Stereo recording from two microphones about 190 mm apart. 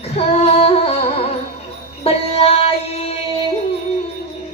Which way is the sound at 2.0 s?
30° left (ahead or behind).